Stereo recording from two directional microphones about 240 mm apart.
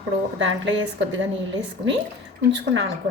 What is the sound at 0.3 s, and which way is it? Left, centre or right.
Speech, right.